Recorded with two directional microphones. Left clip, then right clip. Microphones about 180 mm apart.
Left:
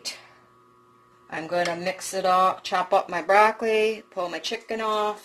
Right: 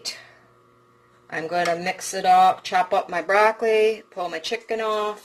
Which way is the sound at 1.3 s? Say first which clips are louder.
Right 3 dB; 25° left (ahead or behind).